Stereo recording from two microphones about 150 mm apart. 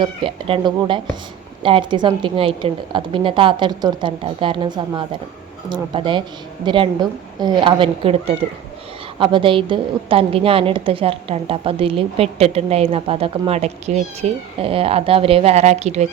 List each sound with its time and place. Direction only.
0.0 s a woman's voice: 35° right (ahead or behind)